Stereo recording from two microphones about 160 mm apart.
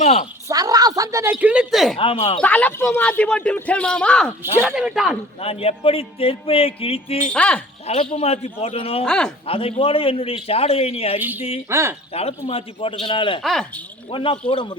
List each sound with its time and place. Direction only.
0.0 s a sound: 45° left (ahead or behind)
0.4 s speech: 20° right (ahead or behind); by 2.0 s centre (ahead or behind)
2.0 s music: 35° left (ahead or behind)
2.4 s a man's voice: 10° left (ahead or behind)
4.6 s speech: 5° right (ahead or behind)
5.4 s music: 40° left (ahead or behind)
7.3 s a man's voice: 10° left (ahead or behind)
8.1 s music: 40° left (ahead or behind)
9.0 s speech: 5° left (ahead or behind)
9.5 s music: 35° left (ahead or behind)
11.2 s speech: 10° right (ahead or behind)
12.5 s music: 35° left (ahead or behind)
13.4 s speech: centre (ahead or behind)
14.1 s music: 35° left (ahead or behind)